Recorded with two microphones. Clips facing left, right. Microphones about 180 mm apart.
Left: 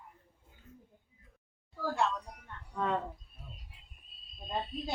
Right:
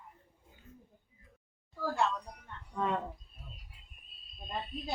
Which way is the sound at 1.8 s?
Centre (ahead or behind).